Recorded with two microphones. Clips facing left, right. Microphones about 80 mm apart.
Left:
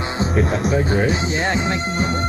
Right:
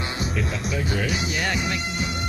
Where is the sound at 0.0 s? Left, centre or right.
Left.